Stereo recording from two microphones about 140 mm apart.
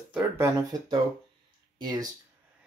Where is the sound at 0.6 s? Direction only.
25° right (ahead or behind).